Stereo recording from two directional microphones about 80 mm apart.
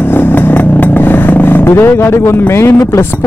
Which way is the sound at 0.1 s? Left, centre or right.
Left.